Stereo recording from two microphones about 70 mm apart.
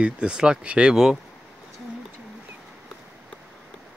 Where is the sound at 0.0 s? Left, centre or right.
Centre.